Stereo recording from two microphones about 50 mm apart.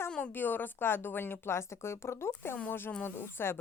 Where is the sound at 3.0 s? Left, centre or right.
Left.